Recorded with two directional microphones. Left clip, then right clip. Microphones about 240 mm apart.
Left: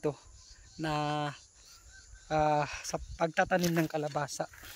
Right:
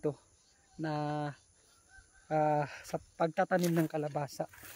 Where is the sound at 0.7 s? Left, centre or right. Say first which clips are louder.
Left 3 dB; centre.